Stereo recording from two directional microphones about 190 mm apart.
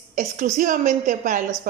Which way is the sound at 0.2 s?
40° right (ahead or behind).